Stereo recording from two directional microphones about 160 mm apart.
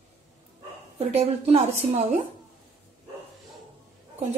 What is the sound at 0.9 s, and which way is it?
Speech, 40° right (ahead or behind).